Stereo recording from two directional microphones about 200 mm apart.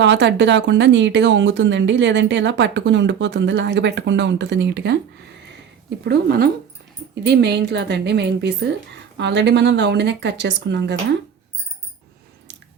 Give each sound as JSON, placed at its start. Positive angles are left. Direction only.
{"t": 0.0, "sound": "speech", "side_deg": -60}
{"t": 6.1, "sound": "speech", "side_deg": -50}